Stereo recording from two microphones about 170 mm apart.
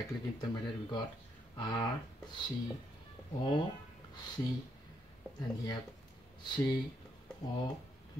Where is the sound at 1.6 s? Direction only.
25° left (ahead or behind).